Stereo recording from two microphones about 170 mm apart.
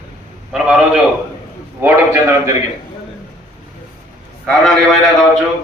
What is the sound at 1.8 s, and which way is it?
Speech, 15° right (ahead or behind).